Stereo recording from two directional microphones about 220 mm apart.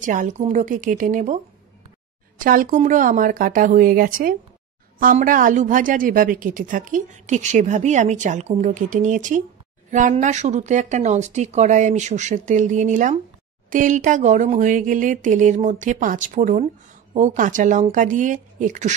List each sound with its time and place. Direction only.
0.0 s speech: 35° right (ahead or behind)